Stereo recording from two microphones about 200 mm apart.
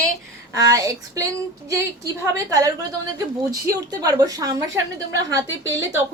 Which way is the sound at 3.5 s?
15° right (ahead or behind).